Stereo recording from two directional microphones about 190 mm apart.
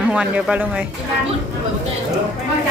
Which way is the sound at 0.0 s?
5° right (ahead or behind).